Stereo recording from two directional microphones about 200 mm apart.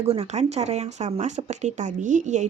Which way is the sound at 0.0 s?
30° right (ahead or behind).